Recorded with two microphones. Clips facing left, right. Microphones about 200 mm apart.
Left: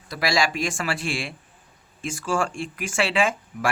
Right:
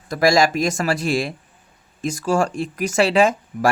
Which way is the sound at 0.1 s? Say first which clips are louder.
Right 8 dB; 45° right (ahead or behind).